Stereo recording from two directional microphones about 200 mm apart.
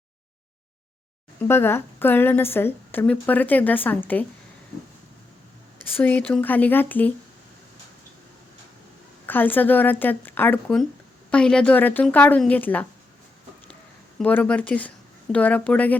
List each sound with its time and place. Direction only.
1.4 s a woman's voice: 10° left (ahead or behind)
6.0 s a woman's voice: 5° left (ahead or behind)
9.2 s a woman's voice: 10° left (ahead or behind)
14.2 s speech: 5° left (ahead or behind)